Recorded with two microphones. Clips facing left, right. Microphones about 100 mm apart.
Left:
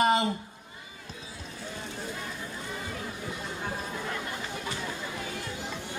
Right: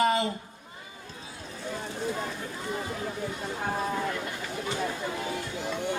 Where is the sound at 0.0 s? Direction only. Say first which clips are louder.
Left 1 dB; 25° left (ahead or behind).